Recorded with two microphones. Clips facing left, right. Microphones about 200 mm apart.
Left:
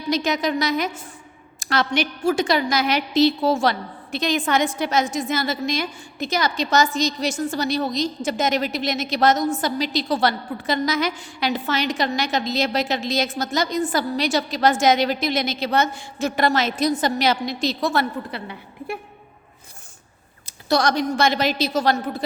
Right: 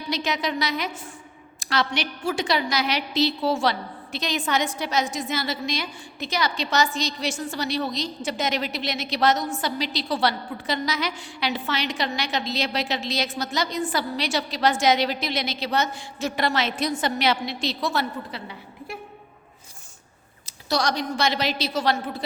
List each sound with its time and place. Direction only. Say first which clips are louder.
0.1 s a woman's voice: left 5 dB; 45° left (ahead or behind)
20.7 s a woman's voice: left 5 dB; 50° left (ahead or behind)